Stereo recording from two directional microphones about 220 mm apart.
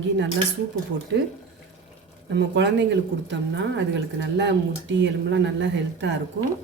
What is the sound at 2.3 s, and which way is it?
Speech, 50° right (ahead or behind).